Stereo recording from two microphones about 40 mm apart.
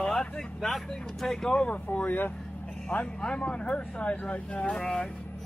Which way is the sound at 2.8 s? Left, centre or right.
Left.